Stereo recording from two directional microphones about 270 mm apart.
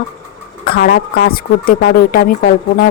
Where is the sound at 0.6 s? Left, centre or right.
Left.